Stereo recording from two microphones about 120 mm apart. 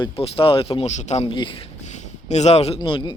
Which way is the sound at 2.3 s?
65° left (ahead or behind).